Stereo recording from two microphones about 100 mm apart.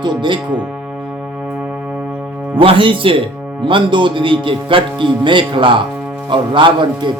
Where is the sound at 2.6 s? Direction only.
60° right (ahead or behind).